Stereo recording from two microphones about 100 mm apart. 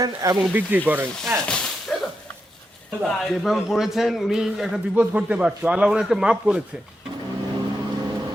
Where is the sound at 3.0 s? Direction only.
Centre (ahead or behind).